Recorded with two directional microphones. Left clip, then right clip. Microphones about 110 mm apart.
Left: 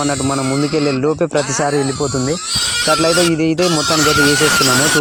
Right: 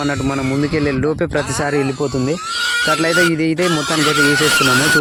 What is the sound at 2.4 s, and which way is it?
Speech, 5° left (ahead or behind).